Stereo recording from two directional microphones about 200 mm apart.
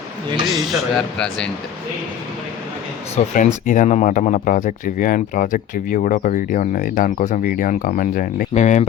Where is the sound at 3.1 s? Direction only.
40° left (ahead or behind).